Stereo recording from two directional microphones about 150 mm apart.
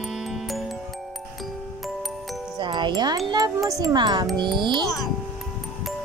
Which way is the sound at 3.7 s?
25° right (ahead or behind).